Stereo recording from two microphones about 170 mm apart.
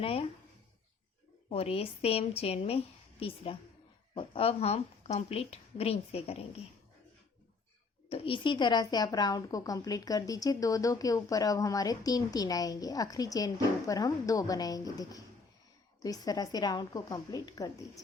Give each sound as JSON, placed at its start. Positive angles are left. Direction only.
{"t": 0.0, "sound": "a woman's voice", "side_deg": 35}
{"t": 1.5, "sound": "a woman's voice", "side_deg": 35}
{"t": 8.1, "sound": "a woman's voice", "side_deg": 30}